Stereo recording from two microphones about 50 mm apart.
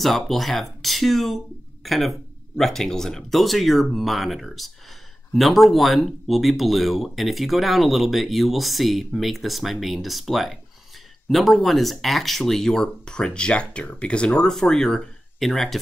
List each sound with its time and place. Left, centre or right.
0.0 s speech: centre